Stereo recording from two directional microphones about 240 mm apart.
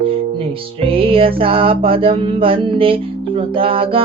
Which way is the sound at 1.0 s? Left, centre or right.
Right.